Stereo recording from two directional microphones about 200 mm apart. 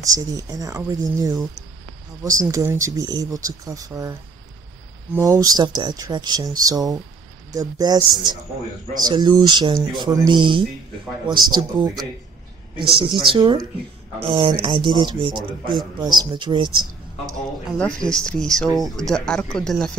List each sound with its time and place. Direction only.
0.0 s speech: 20° right (ahead or behind)
5.1 s speech: 15° right (ahead or behind)
13.3 s speech: 20° right (ahead or behind)
17.6 s speech: 5° left (ahead or behind)